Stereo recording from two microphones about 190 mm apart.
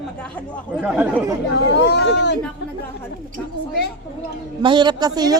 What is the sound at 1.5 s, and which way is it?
Speech, 60° left (ahead or behind).